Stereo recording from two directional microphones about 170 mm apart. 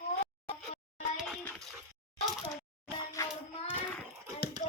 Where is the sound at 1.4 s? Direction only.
10° left (ahead or behind).